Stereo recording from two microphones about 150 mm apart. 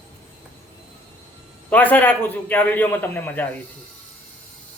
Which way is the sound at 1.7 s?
10° left (ahead or behind).